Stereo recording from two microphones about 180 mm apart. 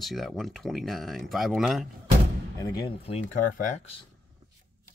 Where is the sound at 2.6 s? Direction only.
25° left (ahead or behind).